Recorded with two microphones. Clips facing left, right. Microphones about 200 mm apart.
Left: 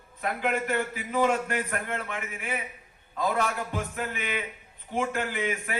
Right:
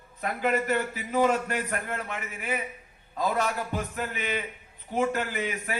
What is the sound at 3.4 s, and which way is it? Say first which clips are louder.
Speech: even; 50° left (ahead or behind).